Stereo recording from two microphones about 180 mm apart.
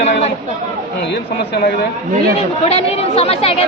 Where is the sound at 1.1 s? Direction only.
65° left (ahead or behind).